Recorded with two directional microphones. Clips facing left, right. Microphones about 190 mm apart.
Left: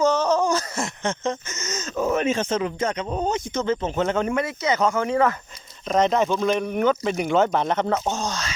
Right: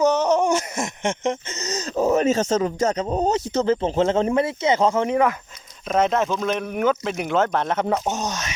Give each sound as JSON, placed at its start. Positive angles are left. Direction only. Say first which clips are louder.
{"t": 0.0, "sound": "speech", "louder": "right 2 dB", "side_deg": -20}
{"t": 5.9, "sound": "speech", "louder": "even", "side_deg": 0}